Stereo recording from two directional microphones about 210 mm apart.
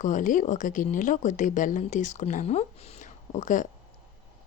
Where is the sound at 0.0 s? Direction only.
40° left (ahead or behind).